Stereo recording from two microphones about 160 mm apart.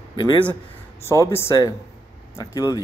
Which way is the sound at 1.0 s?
15° left (ahead or behind).